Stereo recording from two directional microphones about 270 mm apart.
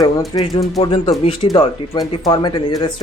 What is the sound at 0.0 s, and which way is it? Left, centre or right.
Speech, centre.